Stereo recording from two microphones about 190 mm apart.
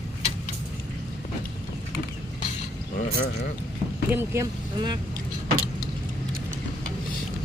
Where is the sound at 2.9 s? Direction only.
55° left (ahead or behind).